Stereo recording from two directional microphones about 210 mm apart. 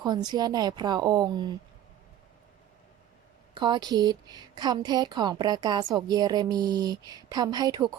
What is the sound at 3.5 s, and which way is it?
A woman's voice, 20° right (ahead or behind).